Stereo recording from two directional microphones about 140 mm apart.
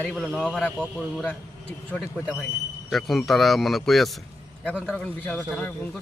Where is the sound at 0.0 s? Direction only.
5° left (ahead or behind).